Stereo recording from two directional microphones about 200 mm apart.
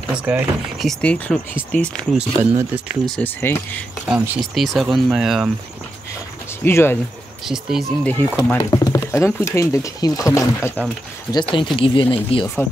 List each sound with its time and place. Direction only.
0.1 s speech: 5° right (ahead or behind)
2.1 s speech: 10° right (ahead or behind)
3.2 s speech: 10° left (ahead or behind)
4.1 s speech: centre (ahead or behind)
6.6 s speech: 10° left (ahead or behind)
7.4 s speech: centre (ahead or behind)
8.5 s speech: 15° left (ahead or behind)
11.5 s speech: 25° left (ahead or behind)